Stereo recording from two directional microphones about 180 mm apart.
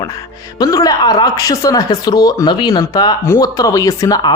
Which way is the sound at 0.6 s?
20° left (ahead or behind).